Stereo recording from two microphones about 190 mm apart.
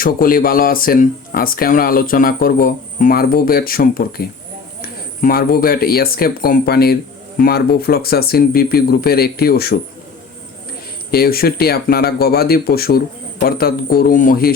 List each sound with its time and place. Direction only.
0.0 s speech: 50° left (ahead or behind)
11.1 s speech: 55° left (ahead or behind)